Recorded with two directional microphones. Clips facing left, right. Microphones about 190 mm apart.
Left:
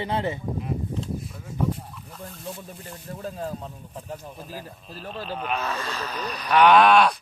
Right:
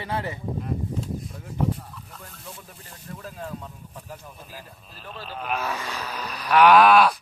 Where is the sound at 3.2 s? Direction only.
35° left (ahead or behind).